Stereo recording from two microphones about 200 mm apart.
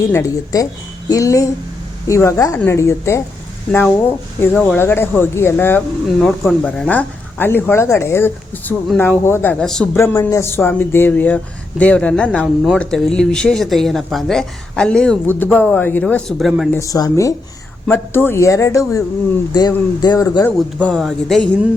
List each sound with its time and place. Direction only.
0.1 s speech: 15° left (ahead or behind)
3.7 s speech: 5° left (ahead or behind)
20.8 s speech: 5° left (ahead or behind)